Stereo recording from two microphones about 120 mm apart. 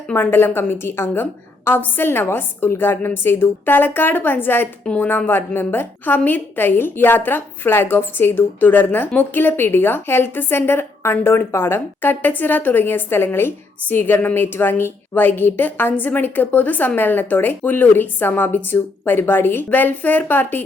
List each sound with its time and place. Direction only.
0.1 s a woman's voice: 20° left (ahead or behind)